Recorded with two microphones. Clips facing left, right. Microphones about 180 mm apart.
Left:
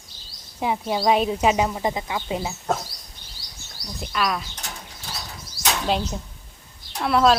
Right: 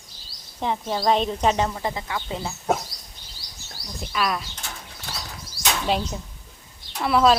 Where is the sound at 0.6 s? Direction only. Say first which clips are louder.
Left 2 dB; 10° left (ahead or behind).